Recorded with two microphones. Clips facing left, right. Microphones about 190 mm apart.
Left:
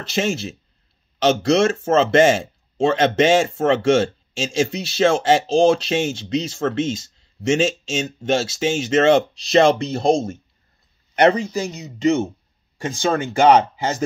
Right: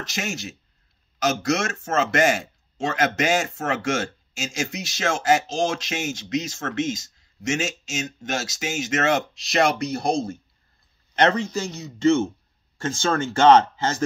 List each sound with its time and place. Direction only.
0.0 s speech: 30° left (ahead or behind); by 14.0 s 15° left (ahead or behind)